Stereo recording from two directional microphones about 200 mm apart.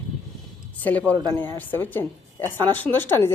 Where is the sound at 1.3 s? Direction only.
10° left (ahead or behind).